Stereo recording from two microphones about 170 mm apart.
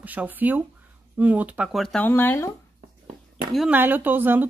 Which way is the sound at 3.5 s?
5° right (ahead or behind).